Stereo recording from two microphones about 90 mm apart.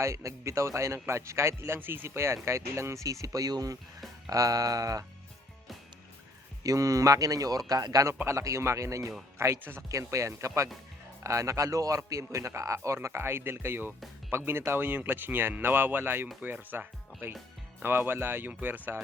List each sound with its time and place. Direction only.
0.0 s a man's voice: 35° right (ahead or behind)
6.6 s a man's voice: 40° right (ahead or behind); by 18.9 s 20° right (ahead or behind)